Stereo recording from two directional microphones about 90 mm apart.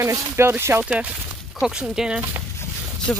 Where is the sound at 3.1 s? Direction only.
10° left (ahead or behind).